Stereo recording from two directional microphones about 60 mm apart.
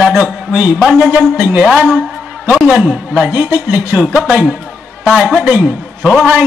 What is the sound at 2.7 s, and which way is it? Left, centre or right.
Speech, centre.